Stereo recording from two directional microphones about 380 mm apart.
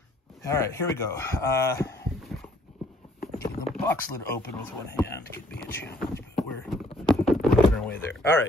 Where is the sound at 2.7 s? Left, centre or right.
Centre.